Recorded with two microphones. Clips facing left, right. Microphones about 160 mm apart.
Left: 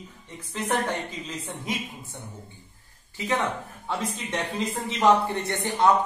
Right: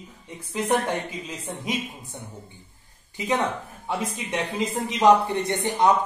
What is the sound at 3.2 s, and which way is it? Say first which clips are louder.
Speech: right 2 dB; 15° right (ahead or behind).